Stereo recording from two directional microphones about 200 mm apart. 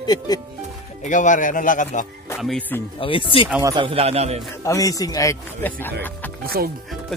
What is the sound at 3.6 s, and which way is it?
Speech, 25° right (ahead or behind).